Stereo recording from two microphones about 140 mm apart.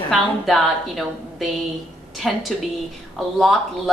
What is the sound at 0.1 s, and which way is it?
A woman's voice, centre (ahead or behind).